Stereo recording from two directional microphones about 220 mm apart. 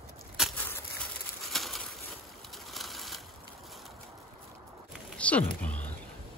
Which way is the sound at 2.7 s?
Centre (ahead or behind).